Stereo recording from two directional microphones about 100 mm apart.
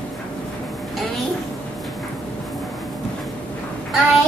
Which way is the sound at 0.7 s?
Centre (ahead or behind).